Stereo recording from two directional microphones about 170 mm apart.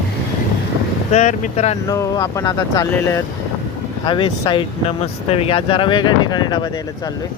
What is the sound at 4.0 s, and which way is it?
Speech, 30° left (ahead or behind).